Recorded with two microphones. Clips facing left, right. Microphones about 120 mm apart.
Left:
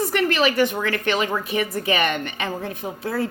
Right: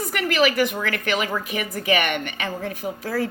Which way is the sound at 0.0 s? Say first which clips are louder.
Left 1 dB; 30° left (ahead or behind).